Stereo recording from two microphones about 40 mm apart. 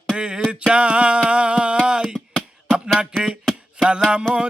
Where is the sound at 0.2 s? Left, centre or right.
Right.